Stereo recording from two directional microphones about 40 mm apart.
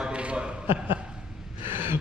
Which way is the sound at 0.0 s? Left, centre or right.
Right.